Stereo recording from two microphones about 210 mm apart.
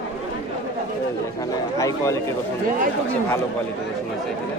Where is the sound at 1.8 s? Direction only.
15° left (ahead or behind).